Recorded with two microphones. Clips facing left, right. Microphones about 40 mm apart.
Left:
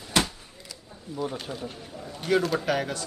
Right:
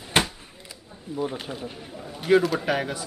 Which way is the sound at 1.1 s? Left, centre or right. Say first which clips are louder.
Right 2 dB; centre.